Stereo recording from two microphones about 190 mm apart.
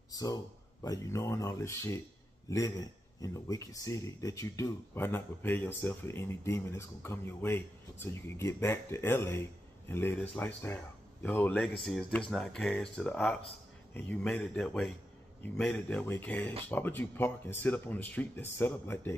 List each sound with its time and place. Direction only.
0.1 s speech: 20° left (ahead or behind)